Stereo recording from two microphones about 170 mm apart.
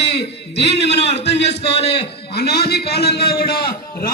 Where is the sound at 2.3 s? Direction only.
65° left (ahead or behind).